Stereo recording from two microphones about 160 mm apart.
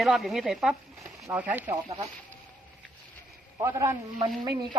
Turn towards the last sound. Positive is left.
turn(degrees=-30)  # may be behind; listen again after turning